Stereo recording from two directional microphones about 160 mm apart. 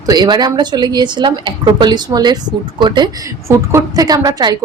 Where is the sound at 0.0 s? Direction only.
25° right (ahead or behind).